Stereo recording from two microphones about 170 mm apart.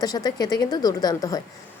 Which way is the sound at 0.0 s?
20° left (ahead or behind).